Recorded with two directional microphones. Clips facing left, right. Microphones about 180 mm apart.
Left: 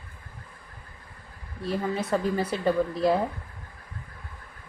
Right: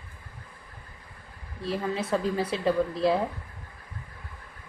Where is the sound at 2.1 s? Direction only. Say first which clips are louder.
Left 1 dB; centre (ahead or behind).